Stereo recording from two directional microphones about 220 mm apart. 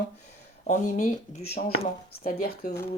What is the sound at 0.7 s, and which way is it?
Speech, 35° left (ahead or behind).